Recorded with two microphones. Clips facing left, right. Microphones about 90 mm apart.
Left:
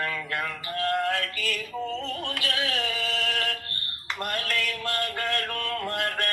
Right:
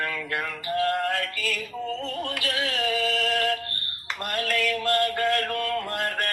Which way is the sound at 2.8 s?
40° right (ahead or behind).